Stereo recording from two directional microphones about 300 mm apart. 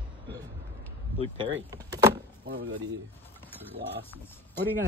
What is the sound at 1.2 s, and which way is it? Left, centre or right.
Speech, centre.